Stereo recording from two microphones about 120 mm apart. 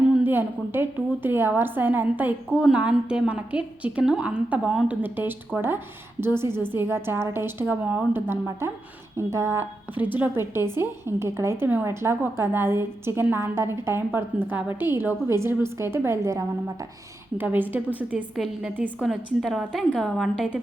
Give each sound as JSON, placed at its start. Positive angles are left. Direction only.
{"t": 0.2, "sound": "a woman's voice", "side_deg": -15}
{"t": 19.0, "sound": "a woman's voice", "side_deg": 0}